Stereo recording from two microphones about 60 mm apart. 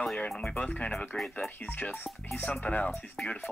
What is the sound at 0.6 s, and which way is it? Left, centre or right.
Speech, left.